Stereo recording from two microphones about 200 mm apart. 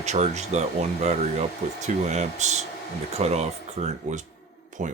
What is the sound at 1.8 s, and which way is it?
Speech, 35° right (ahead or behind).